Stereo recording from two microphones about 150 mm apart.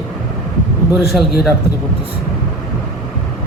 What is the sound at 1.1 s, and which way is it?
Speech, centre (ahead or behind).